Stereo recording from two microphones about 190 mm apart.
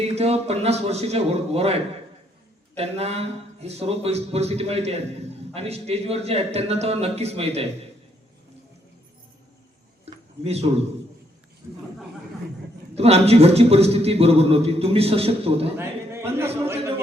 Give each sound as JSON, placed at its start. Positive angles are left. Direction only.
{"t": 0.0, "sound": "a man's voice", "side_deg": -35}
{"t": 10.4, "sound": "a man's voice", "side_deg": -35}
{"t": 13.0, "sound": "a man's voice", "side_deg": -35}
{"t": 15.8, "sound": "a man's voice", "side_deg": -15}